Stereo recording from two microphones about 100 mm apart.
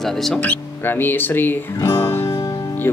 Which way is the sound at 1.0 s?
20° left (ahead or behind).